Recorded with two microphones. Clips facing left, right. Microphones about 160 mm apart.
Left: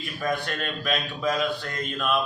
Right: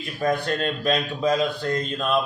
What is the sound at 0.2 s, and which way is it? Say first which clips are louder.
A man's voice: right 5 dB; 35° right (ahead or behind).